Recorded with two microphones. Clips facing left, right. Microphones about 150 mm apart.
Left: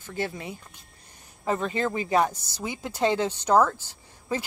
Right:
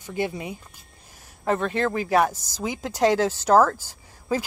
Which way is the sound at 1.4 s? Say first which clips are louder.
Right 3 dB; centre (ahead or behind).